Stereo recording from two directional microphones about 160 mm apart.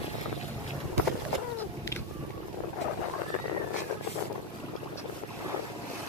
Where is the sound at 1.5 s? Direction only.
15° left (ahead or behind).